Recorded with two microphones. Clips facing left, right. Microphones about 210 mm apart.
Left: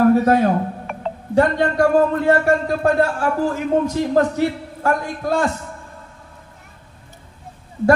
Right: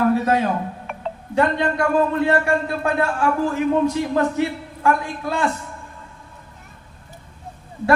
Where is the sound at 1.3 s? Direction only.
40° left (ahead or behind).